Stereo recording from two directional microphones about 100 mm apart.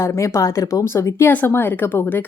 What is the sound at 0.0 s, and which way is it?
Speech, 30° left (ahead or behind).